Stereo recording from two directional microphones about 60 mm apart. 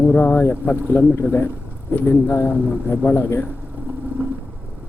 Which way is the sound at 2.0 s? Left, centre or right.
Left.